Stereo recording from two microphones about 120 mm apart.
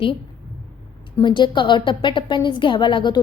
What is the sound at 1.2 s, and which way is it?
A woman's voice, 40° left (ahead or behind).